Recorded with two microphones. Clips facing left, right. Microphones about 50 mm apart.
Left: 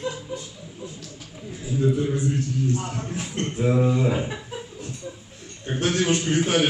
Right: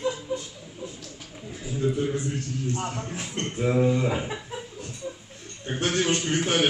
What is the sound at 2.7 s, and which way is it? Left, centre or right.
Speech, right.